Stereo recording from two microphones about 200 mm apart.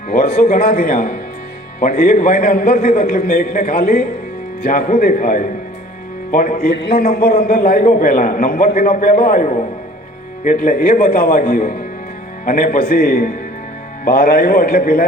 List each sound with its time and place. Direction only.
0.3 s a man's voice: 45° left (ahead or behind)